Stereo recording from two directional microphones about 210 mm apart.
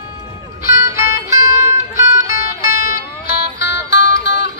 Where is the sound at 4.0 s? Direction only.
55° left (ahead or behind).